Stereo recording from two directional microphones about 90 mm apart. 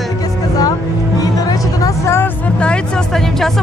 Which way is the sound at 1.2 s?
40° left (ahead or behind).